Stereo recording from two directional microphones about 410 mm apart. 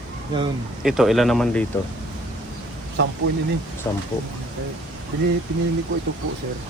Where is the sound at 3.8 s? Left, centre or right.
Centre.